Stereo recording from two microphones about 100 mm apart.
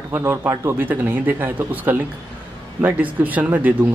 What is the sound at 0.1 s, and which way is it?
Speech, 20° right (ahead or behind).